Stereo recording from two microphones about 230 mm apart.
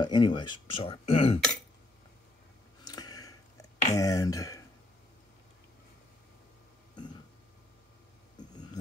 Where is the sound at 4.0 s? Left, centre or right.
Centre.